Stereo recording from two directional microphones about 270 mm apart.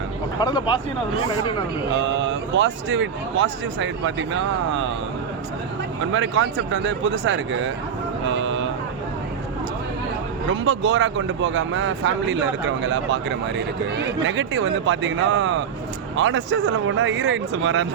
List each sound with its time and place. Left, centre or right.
0.3 s speech: centre
2.0 s speech: right
6.1 s speech: right
8.3 s vehicle: right
10.5 s speech: right